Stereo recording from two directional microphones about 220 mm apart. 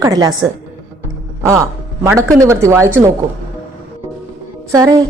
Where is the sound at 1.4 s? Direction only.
15° right (ahead or behind).